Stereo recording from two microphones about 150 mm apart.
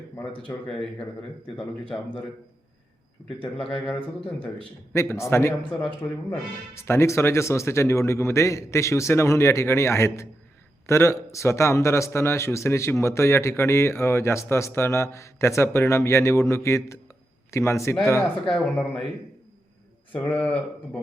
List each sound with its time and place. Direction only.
0.5 s speech: 15° left (ahead or behind)
1.8 s a man's voice: 35° left (ahead or behind)
3.3 s speech: 5° left (ahead or behind)
4.9 s speech: 15° left (ahead or behind)
6.7 s a man's voice: 15° left (ahead or behind)
18.4 s speech: centre (ahead or behind)
20.1 s speech: 10° left (ahead or behind)